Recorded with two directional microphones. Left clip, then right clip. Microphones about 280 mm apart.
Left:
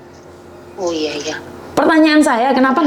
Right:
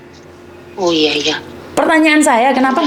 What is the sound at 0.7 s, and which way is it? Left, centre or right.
Speech, right.